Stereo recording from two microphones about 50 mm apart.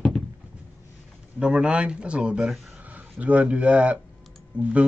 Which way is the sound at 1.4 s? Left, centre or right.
Centre.